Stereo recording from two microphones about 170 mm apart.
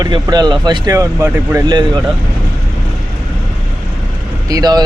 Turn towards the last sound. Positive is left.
turn(degrees=-25)  # may be behind; listen again after turning